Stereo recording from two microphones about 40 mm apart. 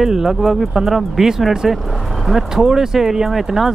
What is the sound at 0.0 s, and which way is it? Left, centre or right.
Speech, centre.